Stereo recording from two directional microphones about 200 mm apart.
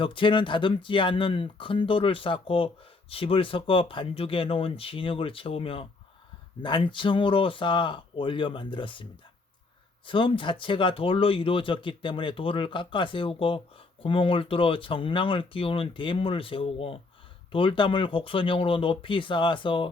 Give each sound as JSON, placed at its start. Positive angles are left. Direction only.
{"t": 0.0, "sound": "speech", "side_deg": 25}
{"t": 10.1, "sound": "speech", "side_deg": 25}